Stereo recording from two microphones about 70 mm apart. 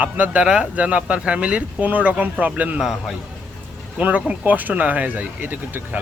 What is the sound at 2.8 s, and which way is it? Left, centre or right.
Speech, centre.